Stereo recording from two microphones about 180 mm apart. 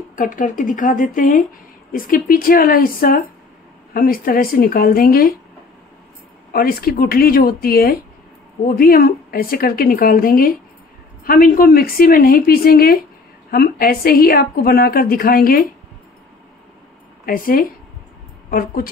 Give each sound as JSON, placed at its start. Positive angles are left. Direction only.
{"t": 0.2, "sound": "a woman's voice", "side_deg": 50}
{"t": 6.5, "sound": "a woman's voice", "side_deg": 55}
{"t": 17.3, "sound": "a woman's voice", "side_deg": 50}